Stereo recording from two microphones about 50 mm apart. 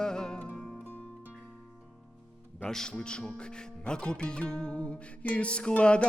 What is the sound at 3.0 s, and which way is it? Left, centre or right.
Speech, centre.